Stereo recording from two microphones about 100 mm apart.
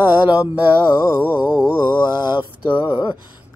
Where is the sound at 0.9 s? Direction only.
40° left (ahead or behind).